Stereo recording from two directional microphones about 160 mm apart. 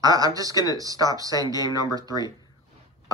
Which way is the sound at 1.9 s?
20° right (ahead or behind).